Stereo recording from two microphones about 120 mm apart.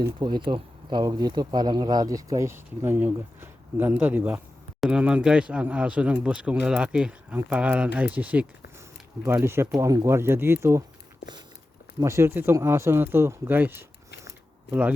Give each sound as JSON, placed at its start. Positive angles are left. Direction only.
{"t": 0.2, "sound": "speech", "side_deg": -40}
{"t": 11.9, "sound": "speech", "side_deg": -25}